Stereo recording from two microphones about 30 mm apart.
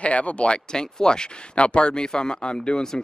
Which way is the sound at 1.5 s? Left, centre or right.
Left.